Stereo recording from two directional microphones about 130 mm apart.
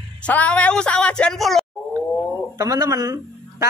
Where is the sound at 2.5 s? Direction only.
25° right (ahead or behind).